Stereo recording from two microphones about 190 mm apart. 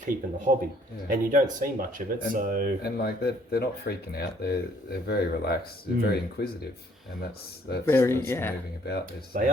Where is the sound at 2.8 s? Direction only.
55° left (ahead or behind).